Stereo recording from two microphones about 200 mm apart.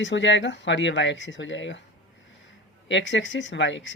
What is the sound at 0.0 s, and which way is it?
Speech, 65° left (ahead or behind).